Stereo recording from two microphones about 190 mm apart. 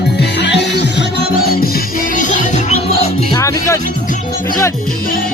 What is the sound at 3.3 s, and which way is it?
Music, 15° left (ahead or behind).